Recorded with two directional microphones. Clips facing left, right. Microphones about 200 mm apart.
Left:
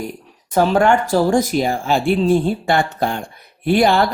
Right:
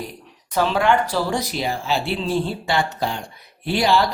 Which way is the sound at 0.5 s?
45° left (ahead or behind).